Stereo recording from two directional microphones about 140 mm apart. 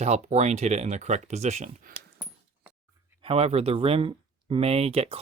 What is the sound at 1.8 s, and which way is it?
Dog, 85° right.